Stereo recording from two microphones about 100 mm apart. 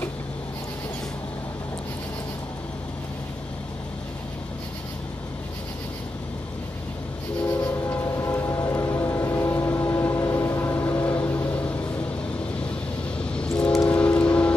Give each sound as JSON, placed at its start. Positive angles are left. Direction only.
{"t": 7.4, "sound": "train", "side_deg": 25}
{"t": 13.2, "sound": "train", "side_deg": 10}